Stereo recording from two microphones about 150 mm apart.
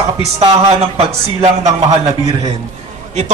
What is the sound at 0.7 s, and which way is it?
A man's voice, 45° right (ahead or behind).